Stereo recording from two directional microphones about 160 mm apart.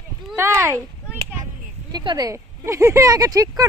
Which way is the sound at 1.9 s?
25° right (ahead or behind).